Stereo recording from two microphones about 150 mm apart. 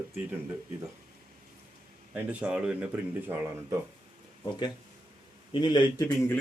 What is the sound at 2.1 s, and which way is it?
Speech, 10° right (ahead or behind).